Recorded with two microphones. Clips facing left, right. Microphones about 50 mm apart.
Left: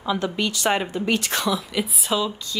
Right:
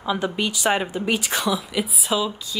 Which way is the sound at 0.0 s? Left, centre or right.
Centre.